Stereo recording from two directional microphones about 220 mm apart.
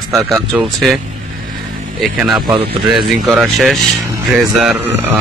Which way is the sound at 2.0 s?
5° right (ahead or behind).